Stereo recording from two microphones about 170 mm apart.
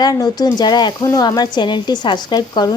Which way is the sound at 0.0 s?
20° left (ahead or behind).